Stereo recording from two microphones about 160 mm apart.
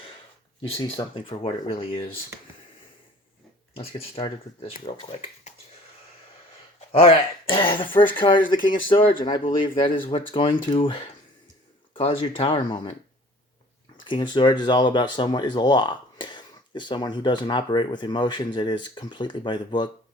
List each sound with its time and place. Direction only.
0.7 s speech: 30° left (ahead or behind)
3.8 s speech: 35° left (ahead or behind)
6.9 s speech: 35° left (ahead or behind)
14.0 s speech: 30° left (ahead or behind)